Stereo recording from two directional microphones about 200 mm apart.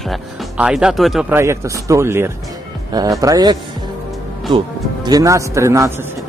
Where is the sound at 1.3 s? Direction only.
15° right (ahead or behind).